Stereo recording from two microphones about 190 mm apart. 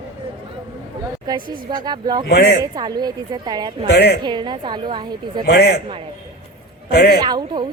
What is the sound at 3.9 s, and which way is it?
Speech, 55° left (ahead or behind).